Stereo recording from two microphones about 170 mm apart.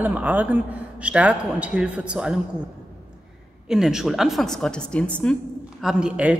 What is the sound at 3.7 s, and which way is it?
A woman's voice, 5° right (ahead or behind).